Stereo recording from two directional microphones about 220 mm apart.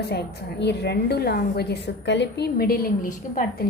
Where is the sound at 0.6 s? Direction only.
50° left (ahead or behind).